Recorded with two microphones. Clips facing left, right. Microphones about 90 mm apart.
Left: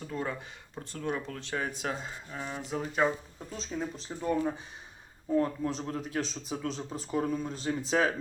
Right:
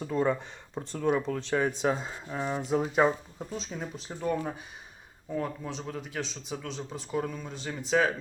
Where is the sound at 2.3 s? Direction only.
40° right (ahead or behind).